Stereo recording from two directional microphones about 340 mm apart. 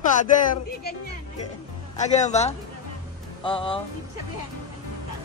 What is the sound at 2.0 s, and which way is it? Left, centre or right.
Speech, centre.